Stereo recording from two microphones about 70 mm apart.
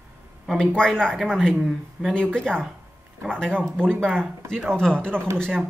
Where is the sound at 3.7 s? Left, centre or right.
Right.